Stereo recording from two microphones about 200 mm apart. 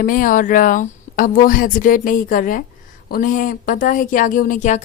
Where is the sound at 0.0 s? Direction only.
40° left (ahead or behind).